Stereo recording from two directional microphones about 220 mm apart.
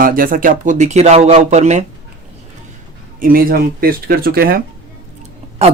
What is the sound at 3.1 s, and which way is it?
Speech, 40° right (ahead or behind).